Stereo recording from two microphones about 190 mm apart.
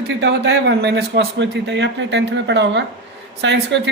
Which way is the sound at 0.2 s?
65° right (ahead or behind).